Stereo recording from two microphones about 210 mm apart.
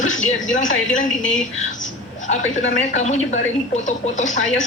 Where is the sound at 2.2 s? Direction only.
35° left (ahead or behind).